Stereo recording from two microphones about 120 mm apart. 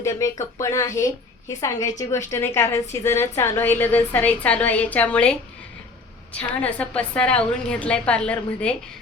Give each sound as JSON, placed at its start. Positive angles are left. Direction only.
{"t": 0.0, "sound": "a woman's voice", "side_deg": 25}
{"t": 6.3, "sound": "a woman's voice", "side_deg": 10}